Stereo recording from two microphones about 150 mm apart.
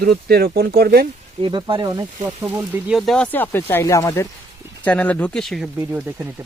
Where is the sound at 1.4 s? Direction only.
30° right (ahead or behind).